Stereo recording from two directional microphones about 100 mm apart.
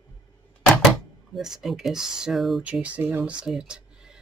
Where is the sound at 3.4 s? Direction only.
5° right (ahead or behind).